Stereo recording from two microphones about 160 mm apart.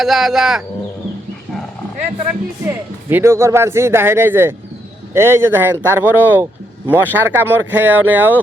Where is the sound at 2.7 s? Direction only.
15° right (ahead or behind).